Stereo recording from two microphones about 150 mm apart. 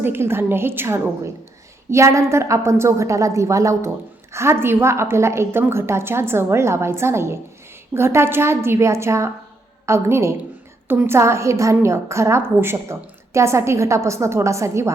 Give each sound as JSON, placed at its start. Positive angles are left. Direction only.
{"t": 0.0, "sound": "a woman's voice", "side_deg": -15}